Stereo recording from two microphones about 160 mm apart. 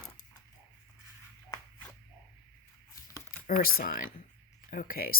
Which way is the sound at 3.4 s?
60° left (ahead or behind).